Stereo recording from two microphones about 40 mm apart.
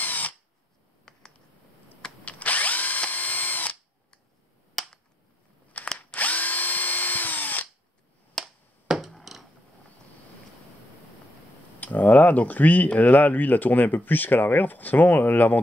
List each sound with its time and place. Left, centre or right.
0.0 s tools: left
2.2 s drill: left
4.8 s finger snapping: centre
5.9 s drill: left
8.4 s finger snapping: centre
8.9 s a sound: centre
9.2 s a sound: centre
11.8 s speech: left